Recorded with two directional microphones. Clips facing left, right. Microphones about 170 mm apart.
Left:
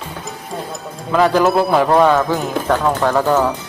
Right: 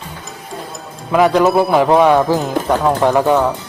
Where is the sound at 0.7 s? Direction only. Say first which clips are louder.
Right 3 dB; centre (ahead or behind).